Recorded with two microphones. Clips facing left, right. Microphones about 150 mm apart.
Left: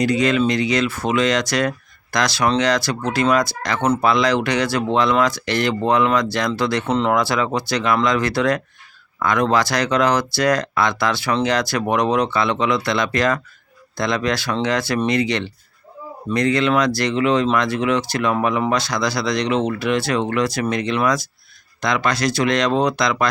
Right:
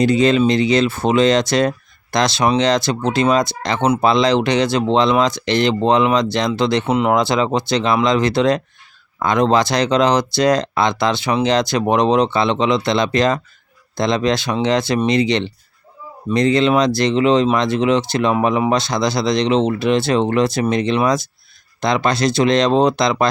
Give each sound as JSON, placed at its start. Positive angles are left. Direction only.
{"t": 0.0, "sound": "speech", "side_deg": -25}